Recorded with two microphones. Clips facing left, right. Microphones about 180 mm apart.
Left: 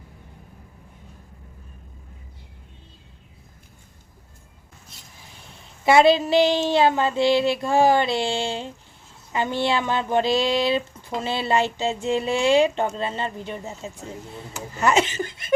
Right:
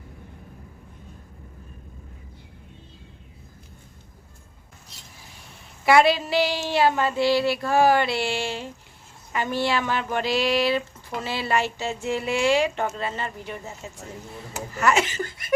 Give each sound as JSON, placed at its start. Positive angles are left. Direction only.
{"t": 5.8, "sound": "speech", "side_deg": 25}